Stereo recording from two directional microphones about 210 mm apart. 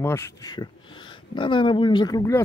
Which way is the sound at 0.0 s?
15° left (ahead or behind).